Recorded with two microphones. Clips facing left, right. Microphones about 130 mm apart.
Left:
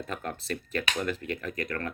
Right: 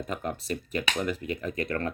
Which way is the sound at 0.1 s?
15° right (ahead or behind).